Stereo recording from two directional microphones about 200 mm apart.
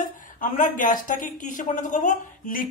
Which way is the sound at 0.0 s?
40° left (ahead or behind).